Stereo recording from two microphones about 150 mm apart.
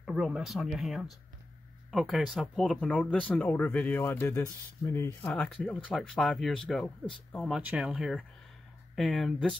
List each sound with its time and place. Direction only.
0.0 s speech: 5° right (ahead or behind); by 5.3 s 20° left (ahead or behind)
5.3 s speech: 10° left (ahead or behind)